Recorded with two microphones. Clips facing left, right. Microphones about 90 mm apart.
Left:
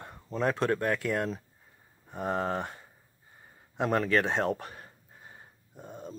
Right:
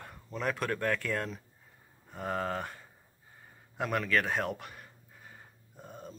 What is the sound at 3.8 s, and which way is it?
A man's voice, 30° left (ahead or behind).